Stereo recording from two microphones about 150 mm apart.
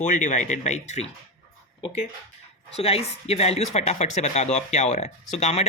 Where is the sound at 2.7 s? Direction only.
45° left (ahead or behind).